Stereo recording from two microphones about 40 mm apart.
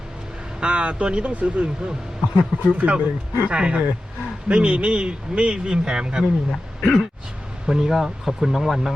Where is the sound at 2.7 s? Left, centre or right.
Right.